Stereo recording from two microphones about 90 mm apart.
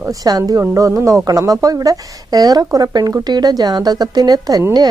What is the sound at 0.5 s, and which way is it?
Speech, 30° right (ahead or behind).